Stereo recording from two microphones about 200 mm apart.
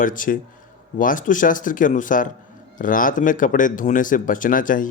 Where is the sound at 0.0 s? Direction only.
45° left (ahead or behind).